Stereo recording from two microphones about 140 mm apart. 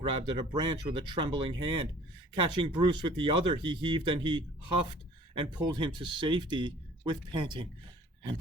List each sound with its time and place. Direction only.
0.0 s speech: 40° right (ahead or behind)